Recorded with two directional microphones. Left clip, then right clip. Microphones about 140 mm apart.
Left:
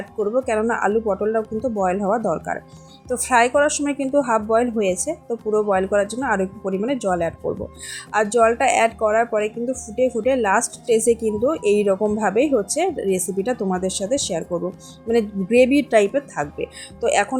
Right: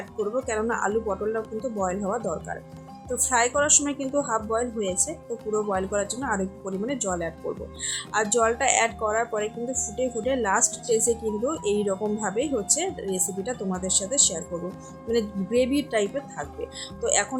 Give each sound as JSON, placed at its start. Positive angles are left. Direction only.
{"t": 0.2, "sound": "a woman's voice", "side_deg": 30}